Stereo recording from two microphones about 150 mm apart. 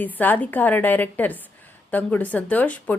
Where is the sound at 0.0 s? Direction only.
10° left (ahead or behind).